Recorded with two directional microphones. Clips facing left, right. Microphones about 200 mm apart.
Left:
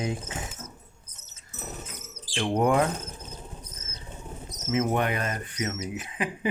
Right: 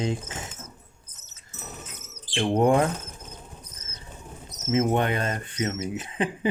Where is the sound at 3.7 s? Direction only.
30° left (ahead or behind).